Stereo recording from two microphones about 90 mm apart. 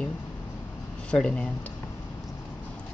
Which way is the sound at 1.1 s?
10° left (ahead or behind).